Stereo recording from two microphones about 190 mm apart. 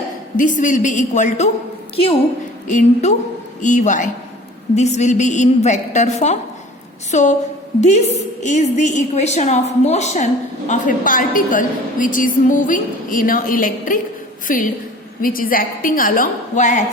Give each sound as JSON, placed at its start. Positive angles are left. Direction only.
{"t": 0.3, "sound": "a woman's voice", "side_deg": 40}
{"t": 2.6, "sound": "a woman's voice", "side_deg": 40}